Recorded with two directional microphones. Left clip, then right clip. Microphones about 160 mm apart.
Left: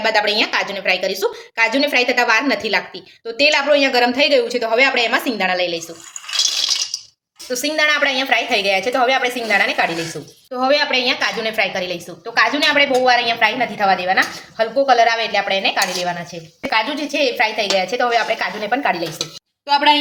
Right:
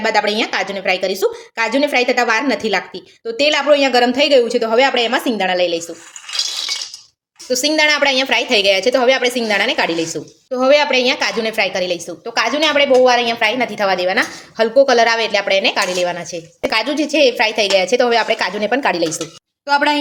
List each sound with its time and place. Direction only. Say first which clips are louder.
0.0 s a woman's voice: even; 40° right (ahead or behind)
7.5 s a woman's voice: right 3 dB; 50° right (ahead or behind)
19.6 s a woman's voice: left 1 dB; 45° right (ahead or behind)